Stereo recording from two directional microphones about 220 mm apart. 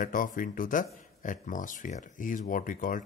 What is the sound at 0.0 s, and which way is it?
A man's voice, 40° left (ahead or behind).